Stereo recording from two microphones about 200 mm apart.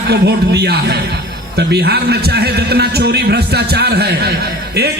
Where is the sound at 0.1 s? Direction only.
55° right (ahead or behind).